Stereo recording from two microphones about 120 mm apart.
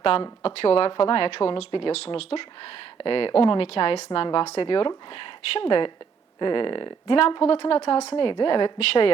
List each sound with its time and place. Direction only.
0.4 s a woman's voice: 55° left (ahead or behind)
8.1 s speech: 45° left (ahead or behind)
8.8 s a woman's voice: 55° left (ahead or behind)